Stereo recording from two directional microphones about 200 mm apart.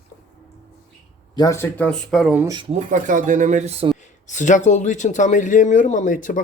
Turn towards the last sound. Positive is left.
turn(degrees=40)  # may be behind; listen again after turning